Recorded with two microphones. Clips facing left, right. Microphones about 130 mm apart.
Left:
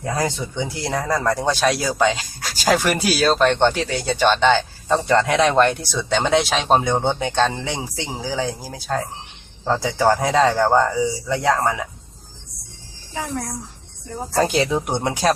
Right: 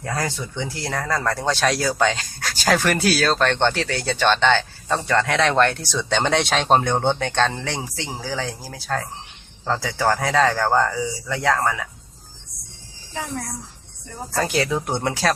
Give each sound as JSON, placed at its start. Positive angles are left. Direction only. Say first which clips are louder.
{"t": 0.0, "sound": "speech", "louder": "left 3 dB", "side_deg": 20}
{"t": 4.9, "sound": "speech", "louder": "left 3 dB", "side_deg": 25}
{"t": 14.3, "sound": "speech", "louder": "left 3 dB", "side_deg": 25}